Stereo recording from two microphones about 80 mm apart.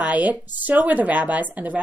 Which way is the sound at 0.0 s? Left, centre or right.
Centre.